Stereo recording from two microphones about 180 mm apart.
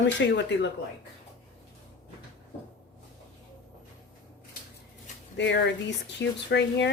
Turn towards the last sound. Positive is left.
turn(degrees=75)  # may be behind; listen again after turning